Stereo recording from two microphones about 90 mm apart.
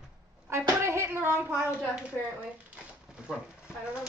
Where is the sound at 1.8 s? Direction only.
10° right (ahead or behind).